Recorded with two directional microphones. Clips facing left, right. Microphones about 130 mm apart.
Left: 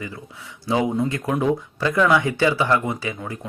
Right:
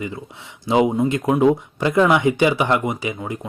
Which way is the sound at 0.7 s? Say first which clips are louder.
Right 4 dB; 20° right (ahead or behind).